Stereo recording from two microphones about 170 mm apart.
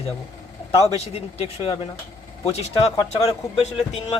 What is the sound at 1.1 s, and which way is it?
Speech, 35° left (ahead or behind).